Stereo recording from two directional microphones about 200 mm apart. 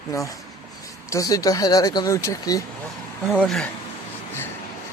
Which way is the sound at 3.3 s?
Centre (ahead or behind).